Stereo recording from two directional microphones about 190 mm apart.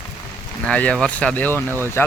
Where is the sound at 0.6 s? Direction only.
5° left (ahead or behind).